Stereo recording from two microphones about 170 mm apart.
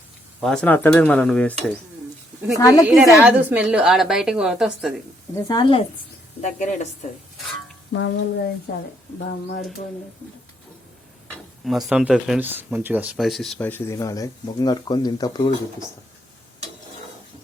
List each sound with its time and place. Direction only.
0.4 s cutlery: 5° left (ahead or behind)
2.6 s speech: 20° left (ahead or behind)
2.8 s a woman's voice: centre (ahead or behind)
5.3 s speech: 25° left (ahead or behind)
6.4 s a woman's voice: 45° left (ahead or behind)
7.9 s speech: 90° left
8.7 s a woman's voice: 55° left (ahead or behind)
11.9 s a woman's voice: 5° right (ahead or behind)
13.7 s speech: 15° left (ahead or behind)